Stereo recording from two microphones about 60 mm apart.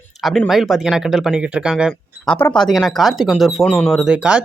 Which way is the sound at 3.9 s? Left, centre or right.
Centre.